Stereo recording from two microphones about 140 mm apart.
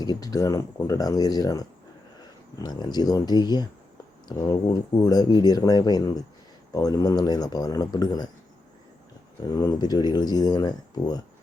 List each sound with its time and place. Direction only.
0.0 s speech: 25° left (ahead or behind)
9.6 s speech: 25° left (ahead or behind)